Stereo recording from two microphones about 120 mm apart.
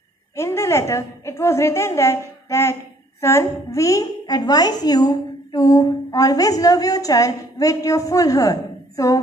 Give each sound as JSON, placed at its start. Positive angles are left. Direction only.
{"t": 0.4, "sound": "a woman's voice", "side_deg": 25}